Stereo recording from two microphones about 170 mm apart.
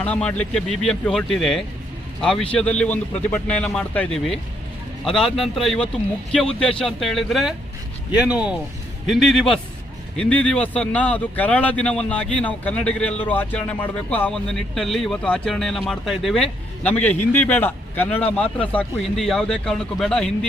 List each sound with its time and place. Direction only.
0.0 s speech: 5° left (ahead or behind)